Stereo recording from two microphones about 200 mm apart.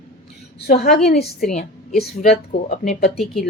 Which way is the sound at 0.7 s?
50° left (ahead or behind).